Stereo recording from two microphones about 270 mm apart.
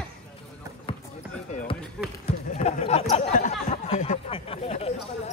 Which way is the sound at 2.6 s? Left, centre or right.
Left.